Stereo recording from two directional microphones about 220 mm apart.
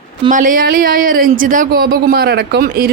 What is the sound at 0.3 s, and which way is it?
Speech, 35° right (ahead or behind).